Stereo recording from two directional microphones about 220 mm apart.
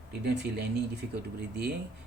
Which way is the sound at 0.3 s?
50° right (ahead or behind).